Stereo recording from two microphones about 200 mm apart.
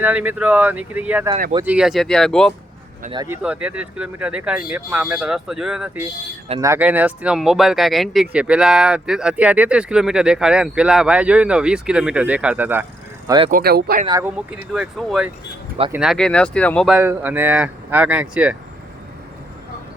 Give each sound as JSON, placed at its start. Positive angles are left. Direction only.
{"t": 0.0, "sound": "speech", "side_deg": -10}
{"t": 3.2, "sound": "speech", "side_deg": -10}
{"t": 13.2, "sound": "speech", "side_deg": -20}
{"t": 13.5, "sound": "speech", "side_deg": -50}
{"t": 14.1, "sound": "speech", "side_deg": -10}